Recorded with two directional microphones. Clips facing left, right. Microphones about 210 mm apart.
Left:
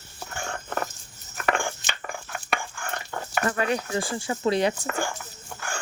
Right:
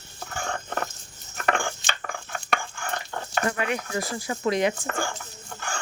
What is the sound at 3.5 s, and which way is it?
Speech, 35° left (ahead or behind).